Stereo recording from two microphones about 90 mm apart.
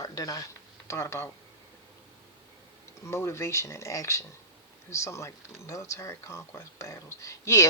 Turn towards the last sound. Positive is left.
turn(degrees=35)  # may be behind; listen again after turning